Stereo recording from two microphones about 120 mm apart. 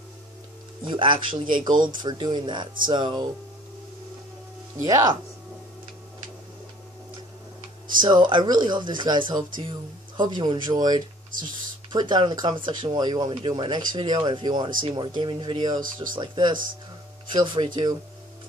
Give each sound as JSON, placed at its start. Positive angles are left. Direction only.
{"t": 0.8, "sound": "speech", "side_deg": -40}
{"t": 4.8, "sound": "speech", "side_deg": -30}
{"t": 8.0, "sound": "speech", "side_deg": -40}